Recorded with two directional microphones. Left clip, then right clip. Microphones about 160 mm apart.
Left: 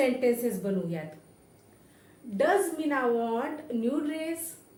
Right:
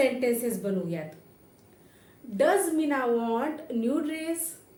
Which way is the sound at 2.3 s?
30° right (ahead or behind).